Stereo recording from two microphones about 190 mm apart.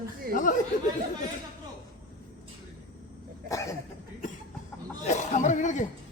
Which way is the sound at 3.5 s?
15° left (ahead or behind).